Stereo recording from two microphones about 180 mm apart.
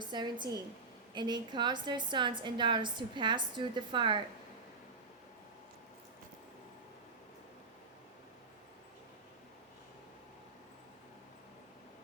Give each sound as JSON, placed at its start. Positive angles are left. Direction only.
{"t": 0.0, "sound": "a woman's voice", "side_deg": -25}